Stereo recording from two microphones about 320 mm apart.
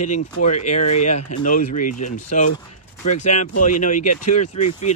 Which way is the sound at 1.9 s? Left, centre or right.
Left.